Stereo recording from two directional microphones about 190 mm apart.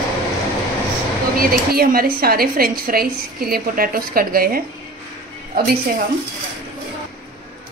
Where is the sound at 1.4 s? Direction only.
50° right (ahead or behind).